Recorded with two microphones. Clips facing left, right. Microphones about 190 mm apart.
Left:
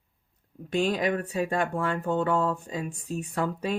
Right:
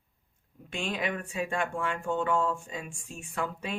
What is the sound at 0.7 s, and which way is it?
Speech, 40° left (ahead or behind).